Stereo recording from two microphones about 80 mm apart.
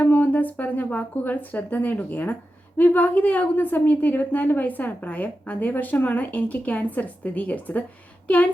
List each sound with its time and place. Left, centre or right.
0.0 s a woman's voice: left